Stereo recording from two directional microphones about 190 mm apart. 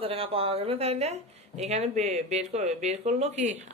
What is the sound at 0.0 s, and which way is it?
Speech, 30° right (ahead or behind).